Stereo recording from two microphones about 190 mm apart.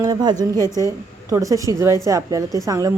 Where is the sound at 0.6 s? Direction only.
15° left (ahead or behind).